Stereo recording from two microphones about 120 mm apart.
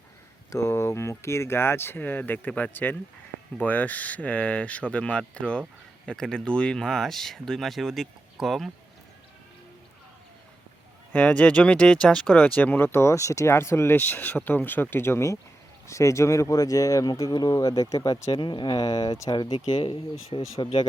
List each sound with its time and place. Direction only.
0.5 s speech: 25° left (ahead or behind); by 8.7 s centre (ahead or behind)
11.1 s speech: 10° left (ahead or behind); by 20.8 s 45° left (ahead or behind)